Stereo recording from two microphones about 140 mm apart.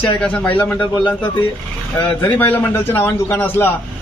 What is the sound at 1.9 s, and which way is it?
A man's voice, 10° left (ahead or behind).